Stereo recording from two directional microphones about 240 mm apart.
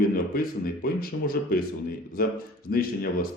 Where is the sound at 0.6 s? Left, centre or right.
Left.